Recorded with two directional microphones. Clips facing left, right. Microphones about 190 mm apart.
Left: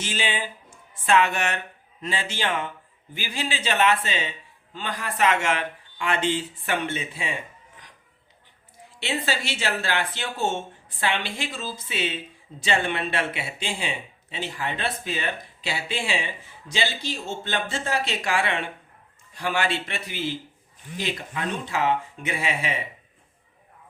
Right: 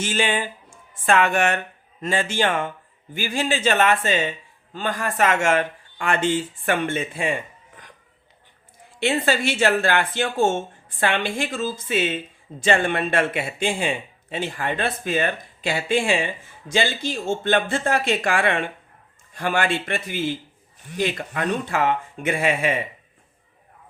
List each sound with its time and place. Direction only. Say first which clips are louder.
0.0 s speech: right 6 dB; 50° right (ahead or behind)
9.0 s speech: right 7 dB; 50° right (ahead or behind)